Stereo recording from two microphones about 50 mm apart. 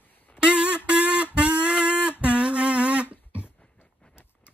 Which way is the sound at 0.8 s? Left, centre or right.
Right.